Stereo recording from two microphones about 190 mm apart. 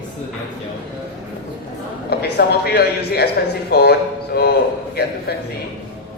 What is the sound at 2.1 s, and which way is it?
Speech, 55° left (ahead or behind).